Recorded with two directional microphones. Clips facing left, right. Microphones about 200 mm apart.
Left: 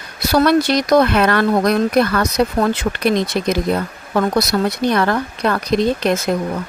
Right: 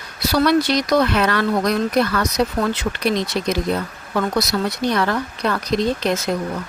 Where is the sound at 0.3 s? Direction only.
50° left (ahead or behind).